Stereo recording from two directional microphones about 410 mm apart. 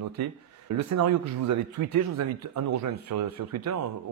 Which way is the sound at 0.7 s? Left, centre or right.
Right.